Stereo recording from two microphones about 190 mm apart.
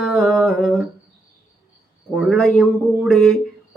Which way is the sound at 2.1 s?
Centre (ahead or behind).